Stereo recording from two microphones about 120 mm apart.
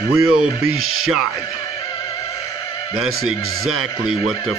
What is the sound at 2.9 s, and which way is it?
Speech, centre (ahead or behind).